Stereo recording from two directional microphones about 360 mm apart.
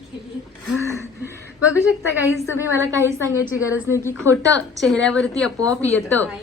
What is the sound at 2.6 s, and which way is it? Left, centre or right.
A woman's voice, centre.